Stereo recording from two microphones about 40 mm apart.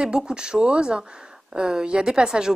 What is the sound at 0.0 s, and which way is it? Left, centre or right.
A woman's voice, centre.